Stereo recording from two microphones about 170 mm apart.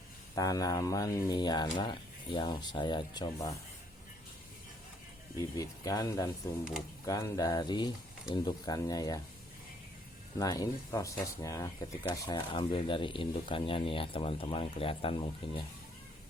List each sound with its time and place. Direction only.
0.3 s speech: 20° left (ahead or behind)
5.4 s speech: 20° left (ahead or behind)
10.3 s speech: 20° left (ahead or behind)